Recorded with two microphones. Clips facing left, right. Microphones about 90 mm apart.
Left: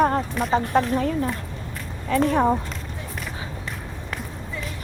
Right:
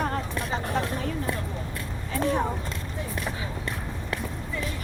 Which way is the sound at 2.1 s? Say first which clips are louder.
Left 8 dB; 60° left (ahead or behind).